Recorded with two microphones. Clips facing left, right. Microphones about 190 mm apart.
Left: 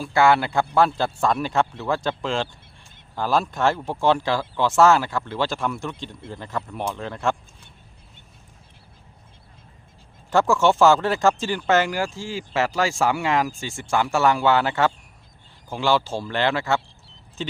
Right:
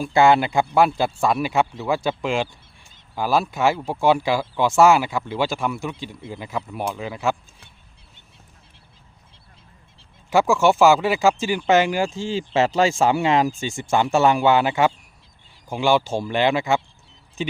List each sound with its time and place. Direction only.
0.0 s speech: 20° right (ahead or behind)
10.2 s speech: 10° right (ahead or behind)